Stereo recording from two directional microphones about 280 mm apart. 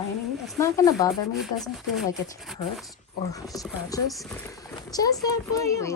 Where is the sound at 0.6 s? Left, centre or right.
Centre.